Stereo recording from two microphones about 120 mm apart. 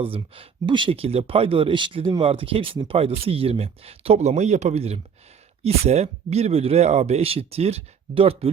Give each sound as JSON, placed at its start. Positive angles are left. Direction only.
{"t": 0.0, "sound": "speech", "side_deg": -50}